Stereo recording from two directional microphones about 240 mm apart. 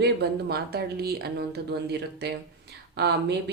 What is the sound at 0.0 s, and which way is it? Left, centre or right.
A woman's voice, right.